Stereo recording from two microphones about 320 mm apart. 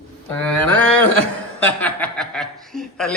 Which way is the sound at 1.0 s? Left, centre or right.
Centre.